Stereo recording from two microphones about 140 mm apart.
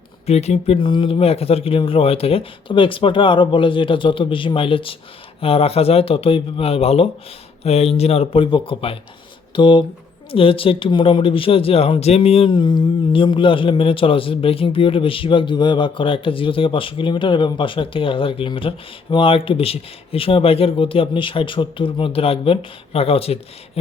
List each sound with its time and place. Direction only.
0.3 s speech: 50° left (ahead or behind)
12.5 s speech: 30° left (ahead or behind)